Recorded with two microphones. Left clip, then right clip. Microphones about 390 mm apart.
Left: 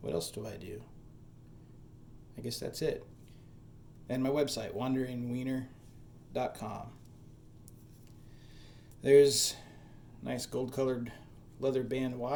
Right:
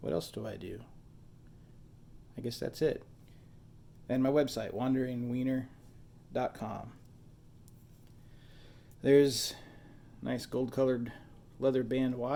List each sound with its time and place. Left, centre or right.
0.0 s speech: centre
2.3 s speech: centre
4.0 s speech: centre
9.0 s speech: centre